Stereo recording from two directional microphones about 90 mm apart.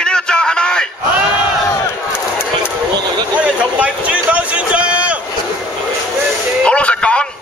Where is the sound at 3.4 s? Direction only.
15° right (ahead or behind).